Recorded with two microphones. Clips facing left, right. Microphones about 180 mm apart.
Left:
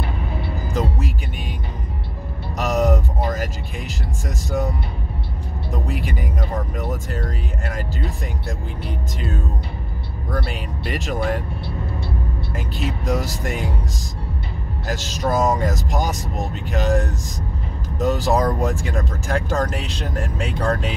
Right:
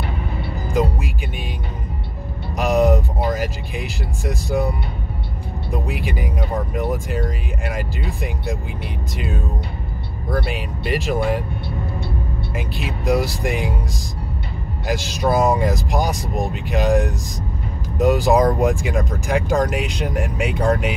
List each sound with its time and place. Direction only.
0.7 s music: 10° right (ahead or behind)
2.6 s speech: 10° right (ahead or behind)
5.9 s speech: 10° right (ahead or behind)
10.3 s speech: 5° right (ahead or behind)
12.8 s speech: 10° right (ahead or behind)
14.9 s speech: 10° right (ahead or behind)